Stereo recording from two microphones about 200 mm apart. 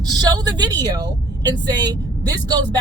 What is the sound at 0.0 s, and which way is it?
Speech, 20° right (ahead or behind).